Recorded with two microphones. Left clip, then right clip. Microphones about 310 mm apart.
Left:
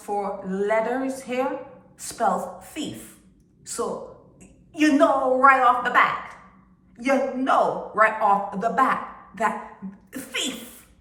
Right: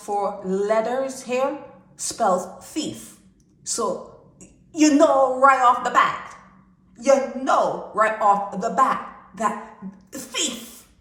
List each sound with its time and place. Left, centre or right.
0.1 s a woman's voice: centre